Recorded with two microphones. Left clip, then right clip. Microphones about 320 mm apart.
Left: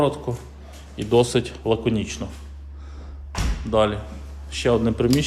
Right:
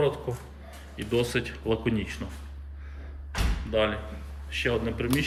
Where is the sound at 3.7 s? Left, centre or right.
Centre.